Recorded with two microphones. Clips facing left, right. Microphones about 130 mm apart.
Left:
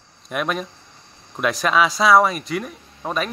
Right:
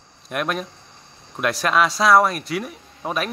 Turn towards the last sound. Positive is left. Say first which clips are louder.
# left 1 dB
turn(degrees=-5)  # may be behind; listen again after turning